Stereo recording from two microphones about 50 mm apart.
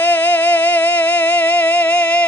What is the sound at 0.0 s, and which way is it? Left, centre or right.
Singing, left.